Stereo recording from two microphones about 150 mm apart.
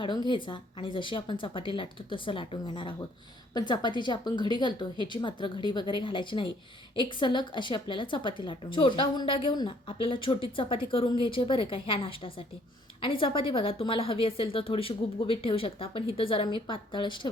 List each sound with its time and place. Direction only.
0.0 s a woman's voice: 30° left (ahead or behind)